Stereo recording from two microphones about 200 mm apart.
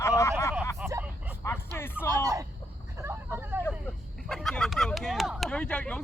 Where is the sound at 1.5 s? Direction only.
10° left (ahead or behind).